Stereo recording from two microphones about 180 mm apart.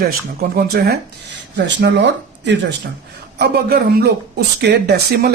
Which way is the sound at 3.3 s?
60° right (ahead or behind).